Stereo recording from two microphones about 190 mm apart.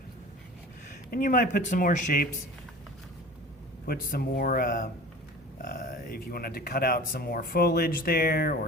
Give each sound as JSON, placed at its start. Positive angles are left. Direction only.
{"t": 0.9, "sound": "speech", "side_deg": 45}
{"t": 3.8, "sound": "speech", "side_deg": 50}